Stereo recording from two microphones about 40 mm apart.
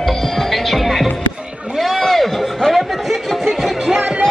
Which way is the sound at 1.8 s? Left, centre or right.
Centre.